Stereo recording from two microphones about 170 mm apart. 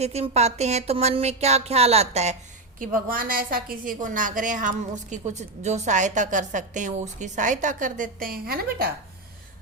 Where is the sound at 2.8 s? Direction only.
55° right (ahead or behind).